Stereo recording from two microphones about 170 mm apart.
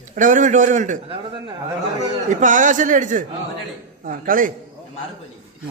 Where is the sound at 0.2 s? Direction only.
50° right (ahead or behind).